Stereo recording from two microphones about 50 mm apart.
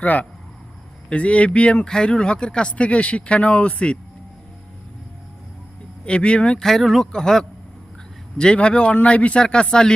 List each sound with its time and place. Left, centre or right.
0.0 s speech: left
6.1 s speech: left
6.6 s speech: centre